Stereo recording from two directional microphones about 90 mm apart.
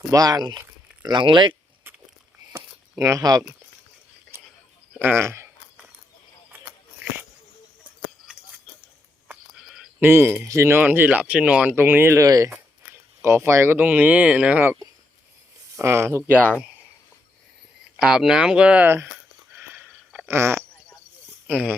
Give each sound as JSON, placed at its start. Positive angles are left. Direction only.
{"t": 0.1, "sound": "speech", "side_deg": -45}
{"t": 3.0, "sound": "speech", "side_deg": -40}
{"t": 4.9, "sound": "speech", "side_deg": -25}
{"t": 9.6, "sound": "a sound", "side_deg": -5}
{"t": 10.0, "sound": "speech", "side_deg": -25}
{"t": 11.7, "sound": "speech", "side_deg": -25}
{"t": 12.2, "sound": "speech", "side_deg": -40}
{"t": 15.7, "sound": "speech", "side_deg": -30}
{"t": 18.0, "sound": "speech", "side_deg": -5}
{"t": 20.2, "sound": "speech", "side_deg": -30}
{"t": 21.4, "sound": "speech", "side_deg": -15}